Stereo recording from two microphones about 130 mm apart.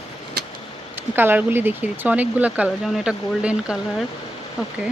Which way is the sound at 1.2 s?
15° right (ahead or behind).